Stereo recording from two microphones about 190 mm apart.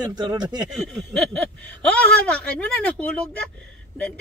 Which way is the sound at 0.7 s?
Centre (ahead or behind).